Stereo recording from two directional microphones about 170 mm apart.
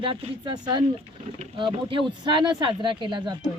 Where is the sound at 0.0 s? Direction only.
30° right (ahead or behind).